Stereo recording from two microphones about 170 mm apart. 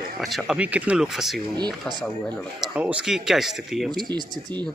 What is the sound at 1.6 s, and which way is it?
Speech, 25° right (ahead or behind).